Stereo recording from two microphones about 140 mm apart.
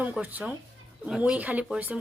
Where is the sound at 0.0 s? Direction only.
10° right (ahead or behind).